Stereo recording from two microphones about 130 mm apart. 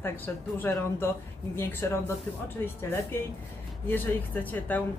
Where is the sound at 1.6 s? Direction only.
15° left (ahead or behind).